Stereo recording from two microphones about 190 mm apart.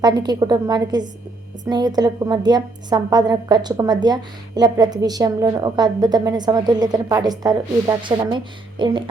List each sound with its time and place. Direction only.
0.0 s a woman's voice: 20° right (ahead or behind)